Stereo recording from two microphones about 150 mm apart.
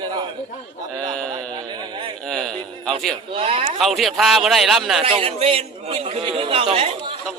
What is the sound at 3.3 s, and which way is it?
Speech, 35° right (ahead or behind).